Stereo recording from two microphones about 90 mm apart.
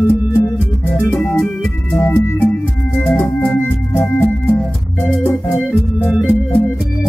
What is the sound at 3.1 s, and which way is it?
Organ, 15° left (ahead or behind).